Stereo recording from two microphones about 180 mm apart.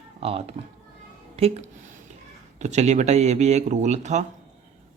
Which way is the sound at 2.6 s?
40° right (ahead or behind).